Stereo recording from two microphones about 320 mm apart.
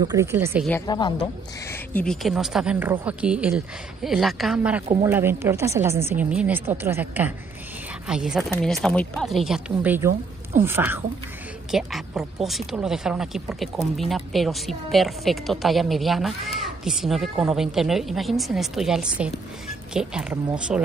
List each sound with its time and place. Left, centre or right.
0.0 s speech: centre
0.7 s a woman's voice: centre
4.8 s speech: centre
5.1 s speech: centre